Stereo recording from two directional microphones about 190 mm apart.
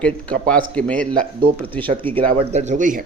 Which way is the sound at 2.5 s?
40° right (ahead or behind).